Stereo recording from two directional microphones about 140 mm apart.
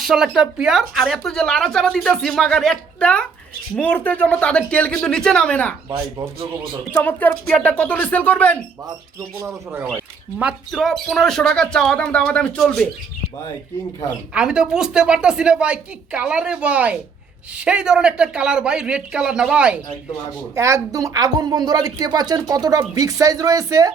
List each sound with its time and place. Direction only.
0.0 s speech: centre (ahead or behind)
6.0 s a woman's voice: 20° right (ahead or behind)
6.9 s speech: 15° left (ahead or behind)
10.3 s speech: 5° right (ahead or behind)
14.3 s speech: 5° right (ahead or behind)
20.6 s a woman's voice: 20° right (ahead or behind)